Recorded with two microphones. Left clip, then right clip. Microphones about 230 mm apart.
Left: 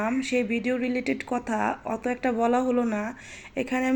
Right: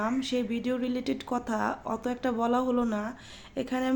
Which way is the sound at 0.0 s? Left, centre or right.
Centre.